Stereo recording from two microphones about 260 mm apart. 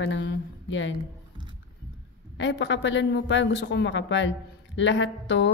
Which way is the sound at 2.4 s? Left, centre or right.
Left.